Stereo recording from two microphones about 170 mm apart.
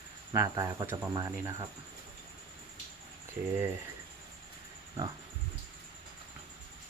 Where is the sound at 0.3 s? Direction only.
20° right (ahead or behind).